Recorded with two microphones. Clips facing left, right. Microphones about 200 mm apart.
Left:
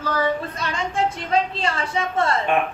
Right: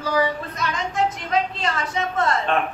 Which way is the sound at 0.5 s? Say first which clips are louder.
Even; 30° left (ahead or behind).